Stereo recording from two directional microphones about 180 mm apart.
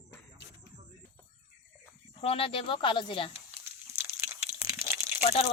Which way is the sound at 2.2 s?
30° left (ahead or behind).